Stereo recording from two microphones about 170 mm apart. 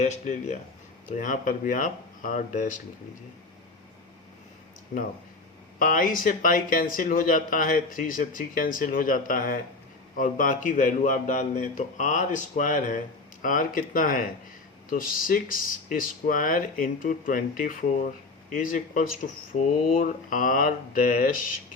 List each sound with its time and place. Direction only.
0.0 s speech: 45° left (ahead or behind)
4.9 s speech: 55° left (ahead or behind)